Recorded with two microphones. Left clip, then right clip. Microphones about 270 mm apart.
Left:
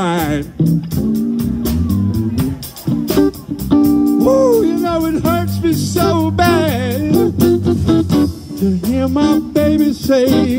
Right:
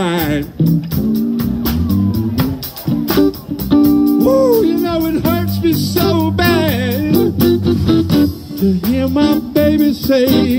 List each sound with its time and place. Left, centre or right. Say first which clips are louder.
0.0 s music: even; centre
3.2 s music: even; centre